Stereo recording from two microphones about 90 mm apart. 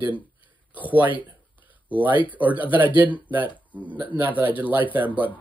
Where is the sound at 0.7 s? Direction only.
20° right (ahead or behind).